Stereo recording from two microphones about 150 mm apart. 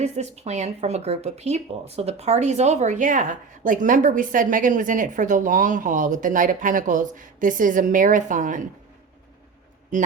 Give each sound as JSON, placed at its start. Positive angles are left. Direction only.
{"t": 0.0, "sound": "speech", "side_deg": -50}